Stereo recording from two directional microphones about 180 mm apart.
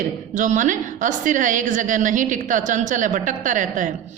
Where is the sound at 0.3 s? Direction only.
45° right (ahead or behind).